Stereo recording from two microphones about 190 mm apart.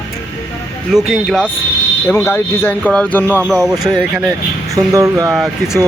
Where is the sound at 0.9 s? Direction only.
Centre (ahead or behind).